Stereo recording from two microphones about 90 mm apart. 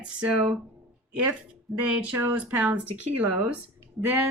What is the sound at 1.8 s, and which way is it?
Speech, 15° right (ahead or behind).